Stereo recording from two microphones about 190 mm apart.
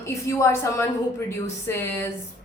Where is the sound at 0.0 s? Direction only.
15° left (ahead or behind).